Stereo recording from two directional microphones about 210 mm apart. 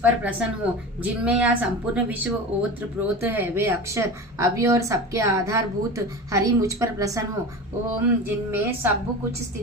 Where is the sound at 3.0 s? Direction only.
10° right (ahead or behind).